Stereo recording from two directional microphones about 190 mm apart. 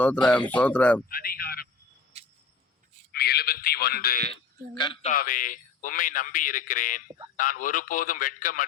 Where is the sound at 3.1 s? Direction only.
60° left (ahead or behind).